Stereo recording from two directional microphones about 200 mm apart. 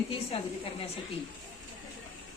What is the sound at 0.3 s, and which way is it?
Speech, 30° left (ahead or behind).